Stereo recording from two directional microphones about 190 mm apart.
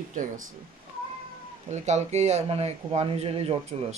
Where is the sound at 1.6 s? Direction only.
35° right (ahead or behind).